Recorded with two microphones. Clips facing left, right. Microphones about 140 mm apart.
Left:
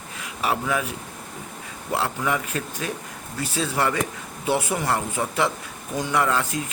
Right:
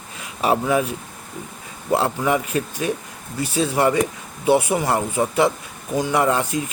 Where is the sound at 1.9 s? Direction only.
20° right (ahead or behind).